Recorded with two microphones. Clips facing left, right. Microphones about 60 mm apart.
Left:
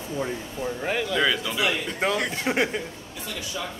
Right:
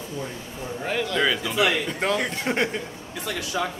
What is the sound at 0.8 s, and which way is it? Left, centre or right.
A man's voice, centre.